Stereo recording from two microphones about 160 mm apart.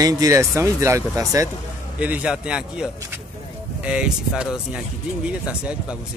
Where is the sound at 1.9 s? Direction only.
10° right (ahead or behind).